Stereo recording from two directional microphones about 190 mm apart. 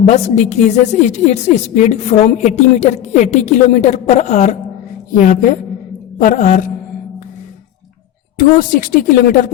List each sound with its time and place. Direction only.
0.0 s a woman's voice: 35° left (ahead or behind)
8.4 s speech: 45° left (ahead or behind)